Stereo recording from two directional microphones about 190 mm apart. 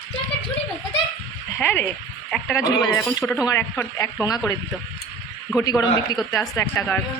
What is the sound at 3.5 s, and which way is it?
Speech, 15° left (ahead or behind).